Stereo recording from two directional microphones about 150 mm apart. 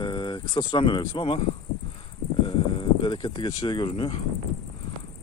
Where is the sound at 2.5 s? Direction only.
35° left (ahead or behind).